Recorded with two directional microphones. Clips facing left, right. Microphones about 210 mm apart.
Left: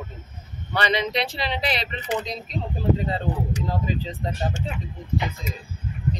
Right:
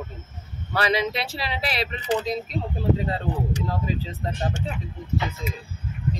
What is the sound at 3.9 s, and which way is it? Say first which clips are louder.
Speech: left 1 dB; 5° right (ahead or behind).